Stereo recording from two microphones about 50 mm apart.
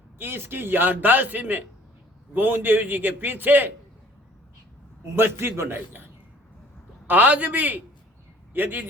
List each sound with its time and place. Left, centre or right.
0.2 s a man's voice: right
5.1 s a man's voice: right
7.1 s a man's voice: right